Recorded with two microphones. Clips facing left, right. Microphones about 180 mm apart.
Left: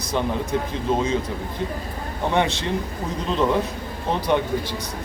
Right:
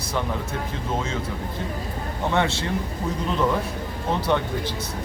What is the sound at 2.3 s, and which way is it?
Speech, 15° left (ahead or behind).